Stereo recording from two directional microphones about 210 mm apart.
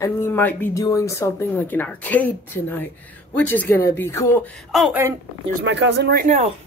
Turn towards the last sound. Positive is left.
turn(degrees=-50)  # may be behind; listen again after turning